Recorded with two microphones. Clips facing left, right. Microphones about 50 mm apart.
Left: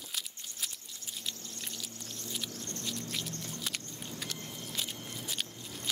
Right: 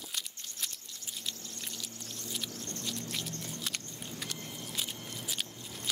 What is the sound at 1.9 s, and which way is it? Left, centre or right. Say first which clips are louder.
Rodents: even; left.